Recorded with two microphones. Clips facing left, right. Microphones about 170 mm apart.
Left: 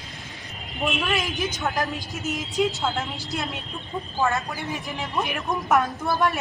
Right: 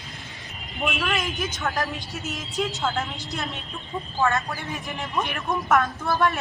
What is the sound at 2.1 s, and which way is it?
Speech, centre (ahead or behind).